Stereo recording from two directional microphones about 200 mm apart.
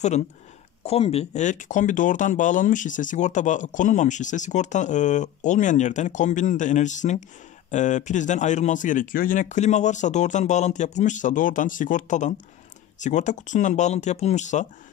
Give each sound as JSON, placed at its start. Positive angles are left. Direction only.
{"t": 0.8, "sound": "speech", "side_deg": 30}